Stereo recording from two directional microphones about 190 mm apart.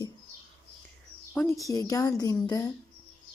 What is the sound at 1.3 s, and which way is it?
A woman's voice, 10° left (ahead or behind).